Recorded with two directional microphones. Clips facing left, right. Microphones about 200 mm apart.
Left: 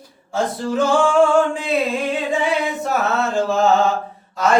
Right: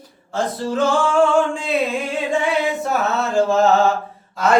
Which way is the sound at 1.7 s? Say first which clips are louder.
Left 1 dB; centre (ahead or behind).